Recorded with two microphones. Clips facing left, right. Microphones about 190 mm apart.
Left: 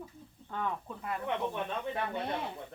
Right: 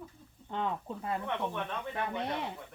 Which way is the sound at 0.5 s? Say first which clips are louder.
Right 2 dB; 25° right (ahead or behind).